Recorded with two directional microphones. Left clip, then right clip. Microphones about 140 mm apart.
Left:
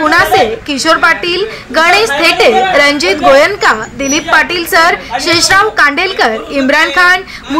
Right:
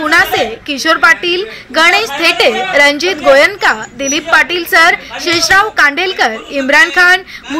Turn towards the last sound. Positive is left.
turn(degrees=-25)  # may be behind; listen again after turning